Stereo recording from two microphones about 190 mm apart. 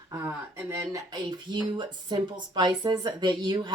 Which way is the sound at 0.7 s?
20° right (ahead or behind).